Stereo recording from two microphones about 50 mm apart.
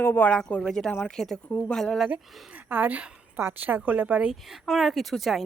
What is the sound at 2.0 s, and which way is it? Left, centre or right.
Speech, right.